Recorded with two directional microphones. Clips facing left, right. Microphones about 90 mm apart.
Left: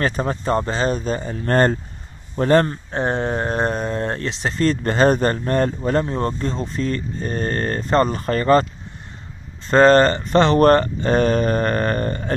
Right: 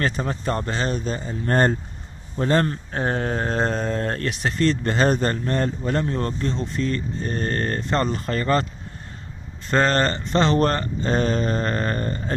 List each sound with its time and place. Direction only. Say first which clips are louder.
0.0 s speech: left 3 dB; 45° left (ahead or behind)
0.5 s speech: left 5 dB; 25° left (ahead or behind)
1.2 s speech: left 2 dB; 75° left (ahead or behind); by 1.8 s 90° left
2.3 s speech: left 5 dB; 50° left (ahead or behind)
2.7 s speech: left 3 dB; 20° left (ahead or behind)
4.6 s speech: left 4 dB; 45° left (ahead or behind)
6.0 s speech: left 2 dB; 25° left (ahead or behind)
6.5 s speech: left 1 dB; 40° left (ahead or behind)
9.7 s speech: left 7 dB; 40° left (ahead or behind)